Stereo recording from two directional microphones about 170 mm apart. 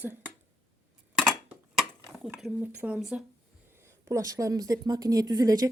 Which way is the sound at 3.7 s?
15° right (ahead or behind).